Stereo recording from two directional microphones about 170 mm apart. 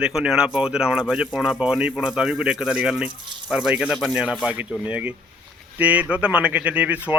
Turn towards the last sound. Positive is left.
turn(degrees=-10)  # may be behind; listen again after turning